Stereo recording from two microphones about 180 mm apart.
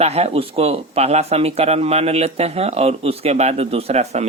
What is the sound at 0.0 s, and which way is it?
Speech, 35° right (ahead or behind).